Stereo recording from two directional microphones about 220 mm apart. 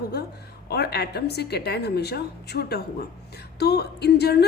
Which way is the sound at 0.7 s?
50° left (ahead or behind).